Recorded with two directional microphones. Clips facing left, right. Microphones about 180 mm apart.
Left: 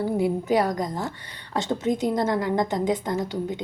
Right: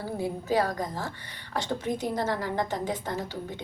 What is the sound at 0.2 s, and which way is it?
A woman's voice, 20° left (ahead or behind).